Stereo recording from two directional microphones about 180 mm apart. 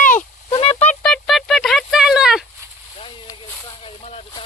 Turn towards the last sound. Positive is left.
turn(degrees=30)  # may be behind; listen again after turning